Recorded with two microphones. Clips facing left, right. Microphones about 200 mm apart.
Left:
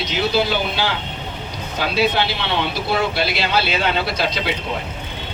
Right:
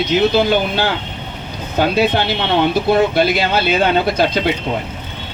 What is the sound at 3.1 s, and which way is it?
Speech, 50° right (ahead or behind).